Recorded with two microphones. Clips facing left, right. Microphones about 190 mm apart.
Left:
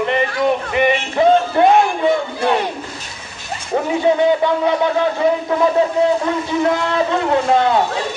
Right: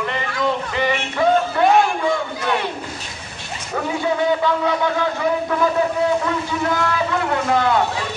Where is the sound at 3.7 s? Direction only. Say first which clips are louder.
Left 6 dB; 25° left (ahead or behind).